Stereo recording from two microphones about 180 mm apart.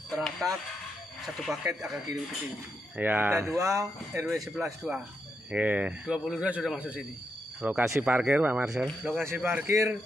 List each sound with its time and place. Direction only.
0.1 s speech: centre (ahead or behind)
3.0 s a man's voice: 10° right (ahead or behind)
4.3 s a man's voice: centre (ahead or behind)